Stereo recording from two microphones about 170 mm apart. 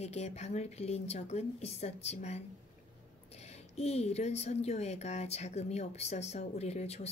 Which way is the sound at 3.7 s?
40° left (ahead or behind).